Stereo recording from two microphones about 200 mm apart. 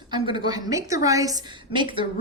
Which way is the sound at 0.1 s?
20° right (ahead or behind).